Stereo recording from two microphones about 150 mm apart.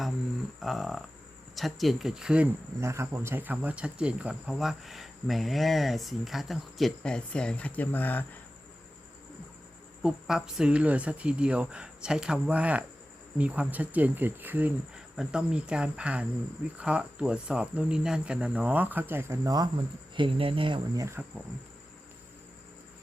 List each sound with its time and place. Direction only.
0.6 s a sound: centre (ahead or behind)
1.5 s speech: centre (ahead or behind)
2.8 s speech: 20° right (ahead or behind); by 8.2 s 10° left (ahead or behind)
10.0 s speech: 5° right (ahead or behind); by 20.8 s 35° right (ahead or behind)
20.9 s speech: 20° right (ahead or behind)